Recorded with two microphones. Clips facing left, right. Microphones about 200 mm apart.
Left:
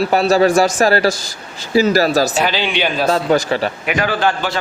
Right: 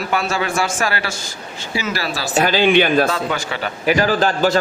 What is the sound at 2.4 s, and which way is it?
Speech, 50° right (ahead or behind).